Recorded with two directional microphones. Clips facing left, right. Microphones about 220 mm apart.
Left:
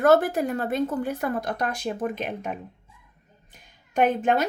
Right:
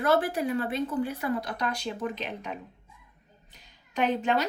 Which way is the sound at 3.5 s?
50° left (ahead or behind).